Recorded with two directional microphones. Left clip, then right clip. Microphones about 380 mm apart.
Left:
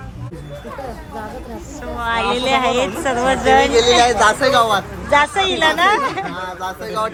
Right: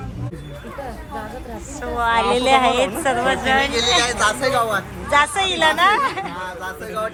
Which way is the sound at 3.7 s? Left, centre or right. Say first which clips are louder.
Left 6 dB; centre.